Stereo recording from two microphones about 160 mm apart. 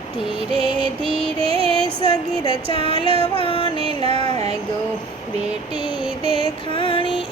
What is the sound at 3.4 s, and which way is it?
Music, 35° left (ahead or behind).